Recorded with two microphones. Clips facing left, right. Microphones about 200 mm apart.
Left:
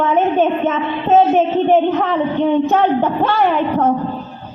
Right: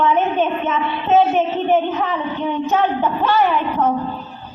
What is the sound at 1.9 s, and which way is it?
Speech, 60° left (ahead or behind).